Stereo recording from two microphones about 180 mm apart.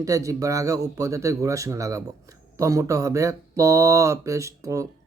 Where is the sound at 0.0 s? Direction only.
20° right (ahead or behind).